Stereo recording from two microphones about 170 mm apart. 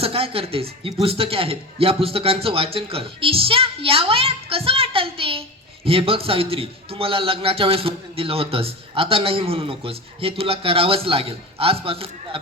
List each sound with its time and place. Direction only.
0.0 s a man's voice: 35° right (ahead or behind)